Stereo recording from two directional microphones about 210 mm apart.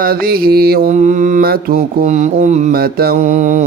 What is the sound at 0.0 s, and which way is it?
Mantra, 45° right (ahead or behind).